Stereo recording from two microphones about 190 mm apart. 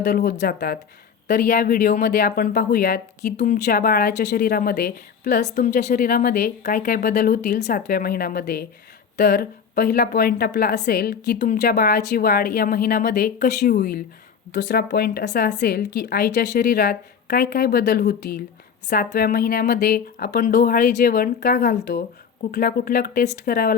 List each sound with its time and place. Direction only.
0.0 s a woman's voice: 40° left (ahead or behind)
15.2 s speech: 40° left (ahead or behind)